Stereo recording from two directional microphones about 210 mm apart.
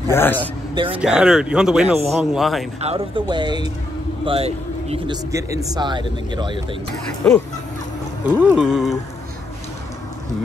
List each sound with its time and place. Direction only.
0.1 s a man's voice: 10° left (ahead or behind)
0.8 s speech: 5° right (ahead or behind)
2.8 s speech: 25° right (ahead or behind)
8.4 s speech: 5° right (ahead or behind)